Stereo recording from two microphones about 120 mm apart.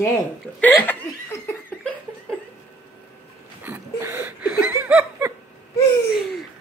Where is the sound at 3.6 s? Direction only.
15° right (ahead or behind).